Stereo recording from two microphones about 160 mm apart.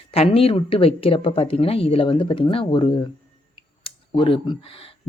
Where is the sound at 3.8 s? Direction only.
35° left (ahead or behind).